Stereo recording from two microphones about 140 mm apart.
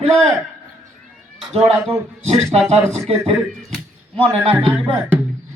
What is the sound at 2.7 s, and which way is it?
A man's voice, 45° right (ahead or behind).